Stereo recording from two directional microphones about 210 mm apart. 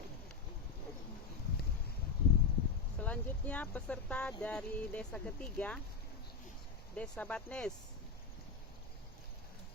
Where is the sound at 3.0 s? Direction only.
5° left (ahead or behind).